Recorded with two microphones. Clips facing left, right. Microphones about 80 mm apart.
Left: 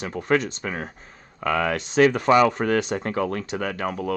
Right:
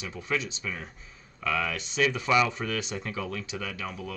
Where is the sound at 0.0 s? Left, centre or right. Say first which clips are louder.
Left 9 dB; left.